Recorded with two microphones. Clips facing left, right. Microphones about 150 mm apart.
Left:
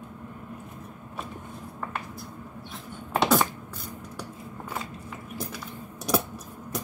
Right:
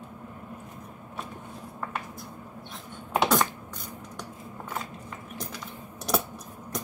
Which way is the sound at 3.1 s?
Centre (ahead or behind).